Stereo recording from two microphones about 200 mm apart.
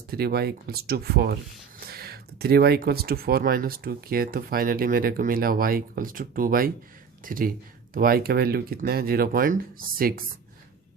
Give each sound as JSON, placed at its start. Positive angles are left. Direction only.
{"t": 0.1, "sound": "speech", "side_deg": -50}